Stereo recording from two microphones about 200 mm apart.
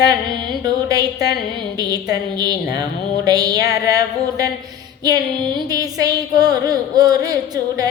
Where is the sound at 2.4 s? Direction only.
20° right (ahead or behind).